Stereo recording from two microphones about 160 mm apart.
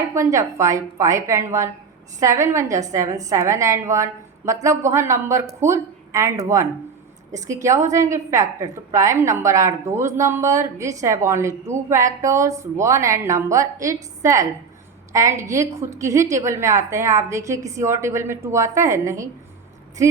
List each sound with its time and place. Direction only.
0.1 s a woman's voice: 20° right (ahead or behind)